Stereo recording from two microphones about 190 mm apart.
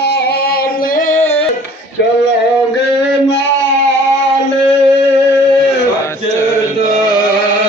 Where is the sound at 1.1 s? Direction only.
40° left (ahead or behind).